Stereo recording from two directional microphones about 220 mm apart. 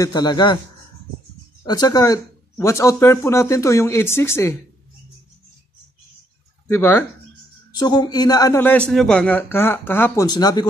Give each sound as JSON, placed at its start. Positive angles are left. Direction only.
{"t": 0.0, "sound": "a man's voice", "side_deg": 20}
{"t": 1.6, "sound": "a man's voice", "side_deg": 20}
{"t": 6.7, "sound": "a man's voice", "side_deg": 10}